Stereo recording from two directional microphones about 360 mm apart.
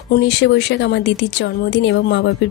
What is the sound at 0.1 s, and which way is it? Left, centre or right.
A woman's voice, left.